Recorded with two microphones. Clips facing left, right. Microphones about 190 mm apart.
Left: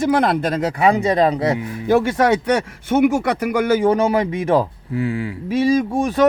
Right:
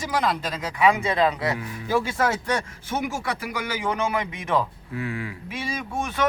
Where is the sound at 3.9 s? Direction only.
35° left (ahead or behind).